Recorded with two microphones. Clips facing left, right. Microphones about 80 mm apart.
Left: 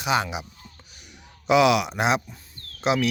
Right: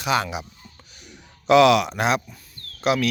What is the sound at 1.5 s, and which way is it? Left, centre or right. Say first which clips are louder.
Speech: right 4 dB; centre.